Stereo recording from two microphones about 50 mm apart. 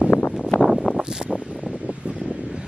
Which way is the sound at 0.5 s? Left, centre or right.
Left.